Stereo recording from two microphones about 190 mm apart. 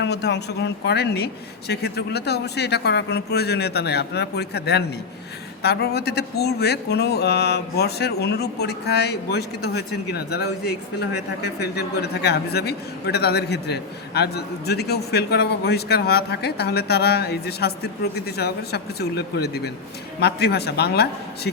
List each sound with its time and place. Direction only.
0.0 s a man's voice: 60° left (ahead or behind)